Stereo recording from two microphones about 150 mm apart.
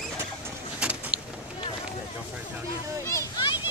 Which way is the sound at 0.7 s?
10° right (ahead or behind).